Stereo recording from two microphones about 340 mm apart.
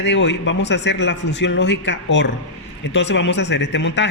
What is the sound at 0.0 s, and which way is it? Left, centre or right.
A man's voice, left.